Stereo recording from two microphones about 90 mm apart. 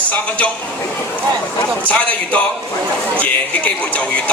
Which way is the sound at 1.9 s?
15° left (ahead or behind).